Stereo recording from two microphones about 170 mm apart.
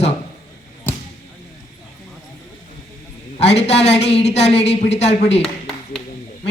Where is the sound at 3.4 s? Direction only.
40° left (ahead or behind).